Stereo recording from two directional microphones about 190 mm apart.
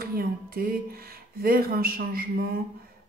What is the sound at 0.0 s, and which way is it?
Speech, 50° right (ahead or behind).